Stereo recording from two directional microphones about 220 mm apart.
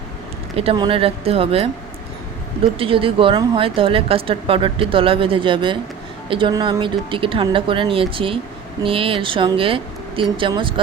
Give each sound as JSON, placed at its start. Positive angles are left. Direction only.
{"t": 0.5, "sound": "speech", "side_deg": -25}
{"t": 2.7, "sound": "speech", "side_deg": -25}